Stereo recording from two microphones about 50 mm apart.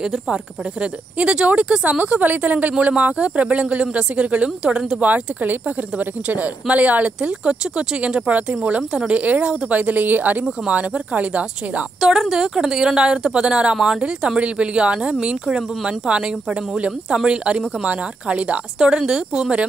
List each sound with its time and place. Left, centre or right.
0.0 s speech: centre
5.0 s speech: right
12.0 s a woman's voice: centre